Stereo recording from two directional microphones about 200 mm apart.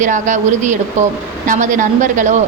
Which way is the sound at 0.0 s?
40° right (ahead or behind).